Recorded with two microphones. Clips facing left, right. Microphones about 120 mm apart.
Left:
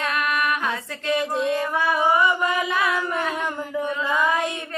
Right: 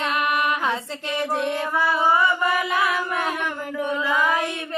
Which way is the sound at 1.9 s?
20° left (ahead or behind).